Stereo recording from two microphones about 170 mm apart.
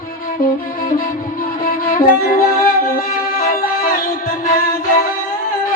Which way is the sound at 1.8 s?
60° left (ahead or behind).